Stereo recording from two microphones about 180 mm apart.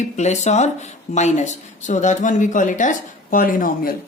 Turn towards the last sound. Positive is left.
turn(degrees=50)  # may be behind; listen again after turning